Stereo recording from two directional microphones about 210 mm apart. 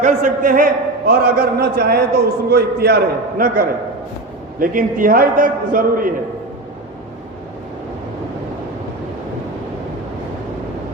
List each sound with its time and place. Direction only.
0.0 s a man's voice: 40° right (ahead or behind)